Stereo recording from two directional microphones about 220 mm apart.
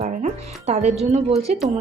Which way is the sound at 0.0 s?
30° right (ahead or behind).